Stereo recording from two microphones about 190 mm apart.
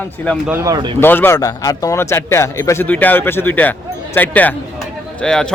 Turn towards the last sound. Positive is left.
turn(degrees=5)  # may be behind; listen again after turning